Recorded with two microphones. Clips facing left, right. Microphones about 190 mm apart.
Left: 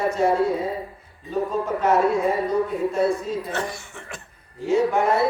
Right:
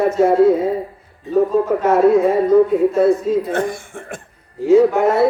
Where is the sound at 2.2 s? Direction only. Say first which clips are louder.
Right 9 dB; 65° right (ahead or behind).